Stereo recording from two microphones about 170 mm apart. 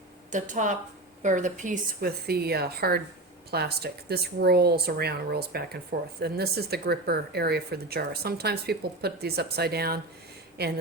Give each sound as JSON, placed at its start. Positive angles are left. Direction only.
{"t": 0.3, "sound": "a woman's voice", "side_deg": -50}